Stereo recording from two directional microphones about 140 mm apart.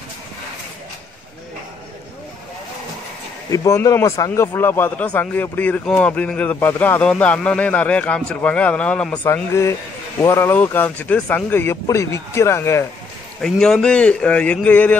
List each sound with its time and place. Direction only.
3.5 s a man's voice: 25° left (ahead or behind)
13.4 s a man's voice: 5° left (ahead or behind)